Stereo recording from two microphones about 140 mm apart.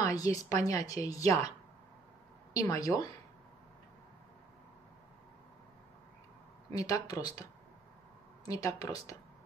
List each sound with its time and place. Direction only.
0.0 s speech: 25° left (ahead or behind)
2.5 s speech: 25° left (ahead or behind)
6.7 s speech: 25° left (ahead or behind)
8.5 s speech: 25° left (ahead or behind)